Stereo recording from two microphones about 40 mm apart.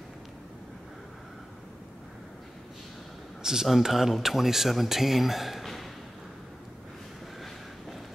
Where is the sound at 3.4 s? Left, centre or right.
Centre.